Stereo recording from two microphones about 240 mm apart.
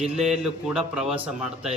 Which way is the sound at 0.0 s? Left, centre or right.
Centre.